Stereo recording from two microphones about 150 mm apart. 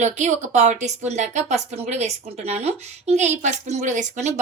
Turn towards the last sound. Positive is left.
turn(degrees=-50)  # may be behind; listen again after turning